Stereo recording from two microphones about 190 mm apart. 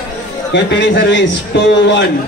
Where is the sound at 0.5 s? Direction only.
70° left (ahead or behind).